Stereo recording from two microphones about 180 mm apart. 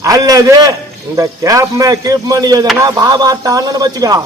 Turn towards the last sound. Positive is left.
turn(degrees=-20)  # may be behind; listen again after turning